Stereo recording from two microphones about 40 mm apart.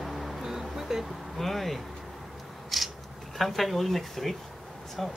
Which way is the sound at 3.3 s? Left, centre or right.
Centre.